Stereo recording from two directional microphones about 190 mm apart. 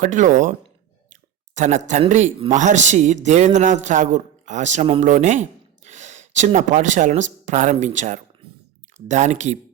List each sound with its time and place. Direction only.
0.0 s a man's voice: 45° right (ahead or behind)